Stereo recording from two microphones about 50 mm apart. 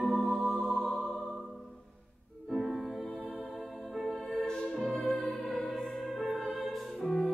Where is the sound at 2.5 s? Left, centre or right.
Centre.